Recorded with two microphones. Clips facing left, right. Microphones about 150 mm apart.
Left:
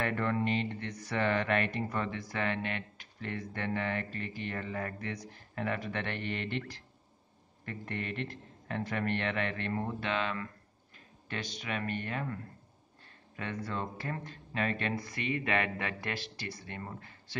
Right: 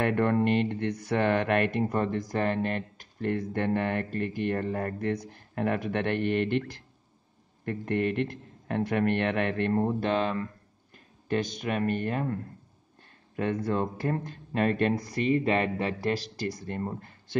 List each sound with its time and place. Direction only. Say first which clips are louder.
0.0 s speech: right 7 dB; 55° right (ahead or behind)
7.6 s a man's voice: right 11 dB; 55° right (ahead or behind); by 10.5 s 35° right (ahead or behind)
11.2 s speech: right 10 dB; 50° right (ahead or behind)
13.4 s speech: right 9 dB; 50° right (ahead or behind)